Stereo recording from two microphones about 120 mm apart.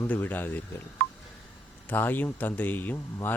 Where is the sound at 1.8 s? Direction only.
15° left (ahead or behind).